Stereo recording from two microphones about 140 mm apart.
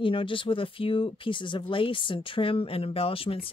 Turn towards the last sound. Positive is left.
turn(degrees=40)  # may be behind; listen again after turning